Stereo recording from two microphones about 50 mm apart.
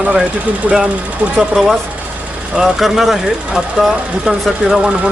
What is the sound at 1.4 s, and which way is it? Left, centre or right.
Speech, centre.